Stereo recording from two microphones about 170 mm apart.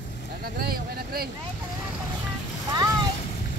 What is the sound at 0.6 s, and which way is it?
Vehicle, 65° right (ahead or behind).